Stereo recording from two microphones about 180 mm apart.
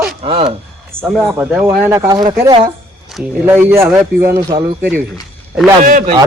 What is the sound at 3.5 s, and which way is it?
Speech, 15° right (ahead or behind).